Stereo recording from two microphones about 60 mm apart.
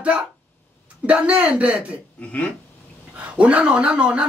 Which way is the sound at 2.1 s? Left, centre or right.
Left.